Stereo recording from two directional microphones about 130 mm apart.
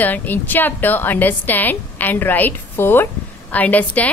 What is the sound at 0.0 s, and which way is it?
A woman's voice, 15° left (ahead or behind).